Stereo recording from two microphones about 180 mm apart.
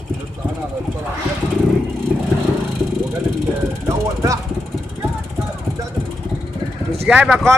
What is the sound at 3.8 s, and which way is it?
Music, 15° right (ahead or behind).